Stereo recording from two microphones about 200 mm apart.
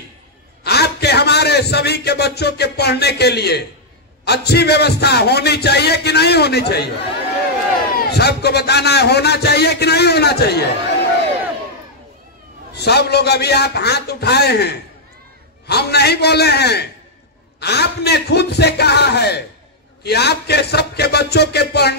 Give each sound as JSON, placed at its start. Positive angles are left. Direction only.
{"t": 0.7, "sound": "a man's voice", "side_deg": 55}
{"t": 8.1, "sound": "a man's voice", "side_deg": 55}
{"t": 12.7, "sound": "a man's voice", "side_deg": 55}